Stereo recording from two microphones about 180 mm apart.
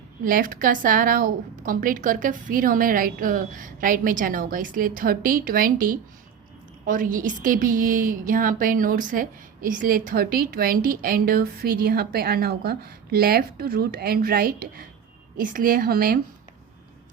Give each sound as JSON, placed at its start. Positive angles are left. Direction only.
{"t": 0.3, "sound": "a woman's voice", "side_deg": -50}